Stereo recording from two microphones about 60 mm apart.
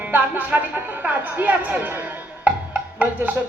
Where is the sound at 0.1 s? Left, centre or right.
Right.